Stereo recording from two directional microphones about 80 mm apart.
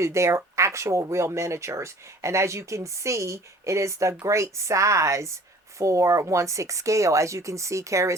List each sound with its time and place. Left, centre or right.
0.0 s speech: right